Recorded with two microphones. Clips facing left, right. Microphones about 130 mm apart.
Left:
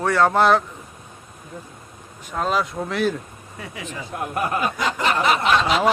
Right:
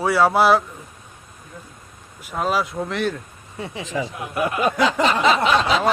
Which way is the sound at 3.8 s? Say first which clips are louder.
Right 9 dB; 90° right.